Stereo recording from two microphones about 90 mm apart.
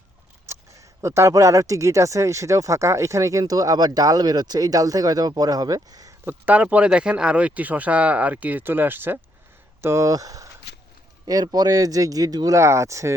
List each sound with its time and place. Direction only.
0.4 s speech: 30° right (ahead or behind)
6.2 s speech: 20° right (ahead or behind)
9.8 s speech: 35° right (ahead or behind)
12.5 s speech: 35° right (ahead or behind)